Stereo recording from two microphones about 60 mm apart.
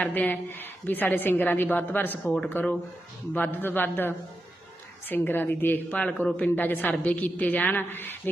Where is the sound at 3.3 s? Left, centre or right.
Left.